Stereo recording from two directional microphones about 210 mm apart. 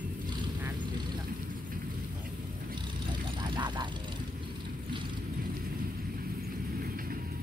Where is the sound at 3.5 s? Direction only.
20° right (ahead or behind).